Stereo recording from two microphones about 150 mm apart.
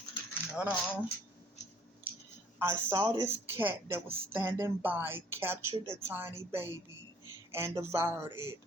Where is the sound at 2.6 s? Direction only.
15° right (ahead or behind).